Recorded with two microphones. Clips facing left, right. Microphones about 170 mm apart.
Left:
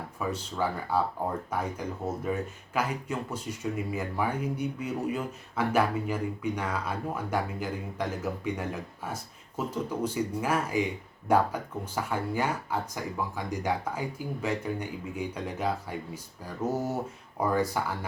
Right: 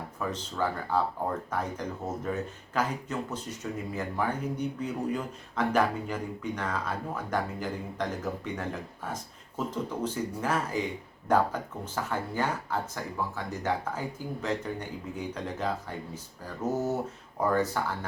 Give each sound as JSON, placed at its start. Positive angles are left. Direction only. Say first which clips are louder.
{"t": 0.2, "sound": "speech", "louder": "left 1 dB", "side_deg": 10}